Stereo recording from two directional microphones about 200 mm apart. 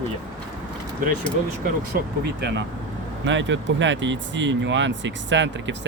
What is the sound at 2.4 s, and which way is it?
Speech, 60° right (ahead or behind).